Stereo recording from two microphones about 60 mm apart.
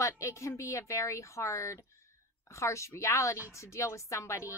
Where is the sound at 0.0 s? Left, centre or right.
Left.